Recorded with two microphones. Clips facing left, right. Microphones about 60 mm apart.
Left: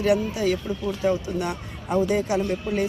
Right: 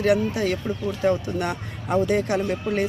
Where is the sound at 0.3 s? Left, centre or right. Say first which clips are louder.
Even; right.